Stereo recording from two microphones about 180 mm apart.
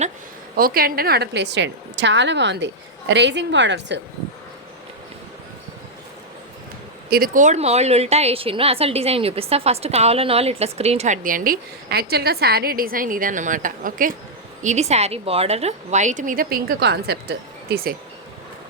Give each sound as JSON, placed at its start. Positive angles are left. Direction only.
{"t": 0.5, "sound": "a woman's voice", "side_deg": -55}
{"t": 7.1, "sound": "a woman's voice", "side_deg": -50}